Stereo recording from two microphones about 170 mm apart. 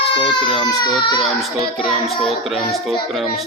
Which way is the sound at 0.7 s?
25° left (ahead or behind).